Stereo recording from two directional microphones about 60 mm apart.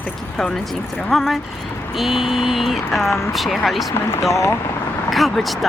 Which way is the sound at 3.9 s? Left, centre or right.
Left.